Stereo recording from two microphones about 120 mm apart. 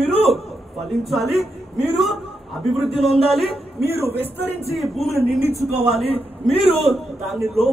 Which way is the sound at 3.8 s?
20° right (ahead or behind).